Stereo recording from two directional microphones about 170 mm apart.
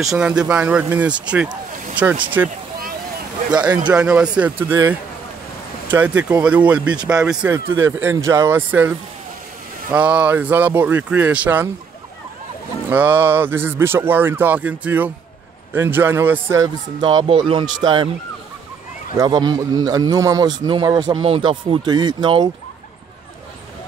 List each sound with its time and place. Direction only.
0.0 s speech: 5° right (ahead or behind)
3.9 s speech: 5° right (ahead or behind)
5.9 s speech: 10° right (ahead or behind)
7.5 s speech: 15° right (ahead or behind)
12.9 s speech: 10° right (ahead or behind); by 18.1 s 30° right (ahead or behind)
19.1 s speech: 25° right (ahead or behind)